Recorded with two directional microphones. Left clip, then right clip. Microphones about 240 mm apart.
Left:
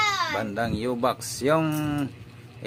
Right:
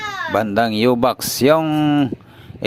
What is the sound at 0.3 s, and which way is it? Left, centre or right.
Speech, right.